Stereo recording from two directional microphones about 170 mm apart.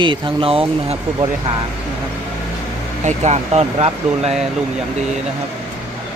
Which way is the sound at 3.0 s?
40° right (ahead or behind).